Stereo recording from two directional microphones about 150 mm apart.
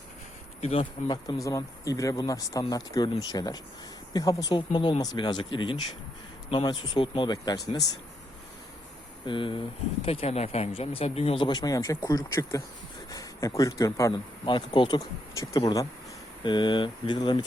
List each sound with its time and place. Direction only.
0.6 s speech: 40° left (ahead or behind)
1.0 s speech: 30° left (ahead or behind)
9.2 s speech: 35° left (ahead or behind)
16.4 s speech: 30° left (ahead or behind)